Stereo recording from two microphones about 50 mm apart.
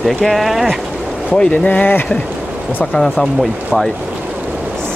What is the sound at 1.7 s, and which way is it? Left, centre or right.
Speech, left.